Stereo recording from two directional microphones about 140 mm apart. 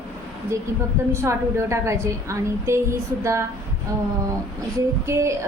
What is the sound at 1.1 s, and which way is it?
A woman's voice, 20° right (ahead or behind).